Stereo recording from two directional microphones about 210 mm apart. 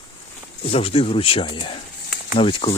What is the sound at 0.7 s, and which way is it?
Speech, 25° left (ahead or behind).